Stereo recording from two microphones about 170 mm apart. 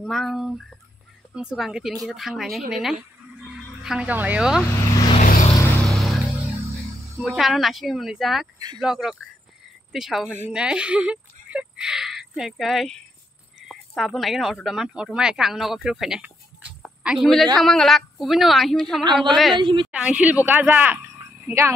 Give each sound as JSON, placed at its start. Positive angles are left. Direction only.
{"t": 0.0, "sound": "a sound", "side_deg": 0}
{"t": 1.3, "sound": "a woman's voice", "side_deg": -5}
{"t": 5.2, "sound": "vehicle", "side_deg": 50}
{"t": 5.9, "sound": "music", "side_deg": 0}
{"t": 7.2, "sound": "a woman's voice", "side_deg": 0}
{"t": 19.5, "sound": "a woman's voice", "side_deg": -30}
{"t": 19.9, "sound": "speech", "side_deg": -5}